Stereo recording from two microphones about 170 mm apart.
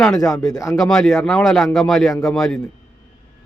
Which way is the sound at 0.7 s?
Centre (ahead or behind).